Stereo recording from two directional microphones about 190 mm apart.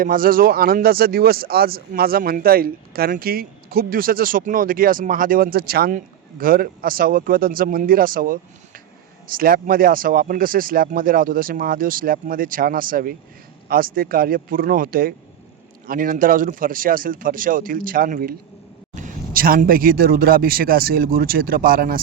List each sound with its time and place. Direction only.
0.0 s speech: 50° right (ahead or behind)